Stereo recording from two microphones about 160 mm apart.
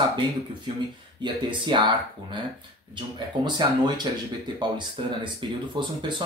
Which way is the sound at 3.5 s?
25° right (ahead or behind).